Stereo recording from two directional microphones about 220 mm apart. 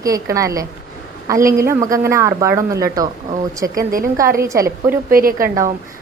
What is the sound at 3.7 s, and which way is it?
Speech, 40° right (ahead or behind).